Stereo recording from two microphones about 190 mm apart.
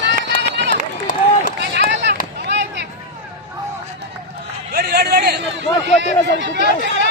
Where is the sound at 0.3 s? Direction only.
65° right (ahead or behind).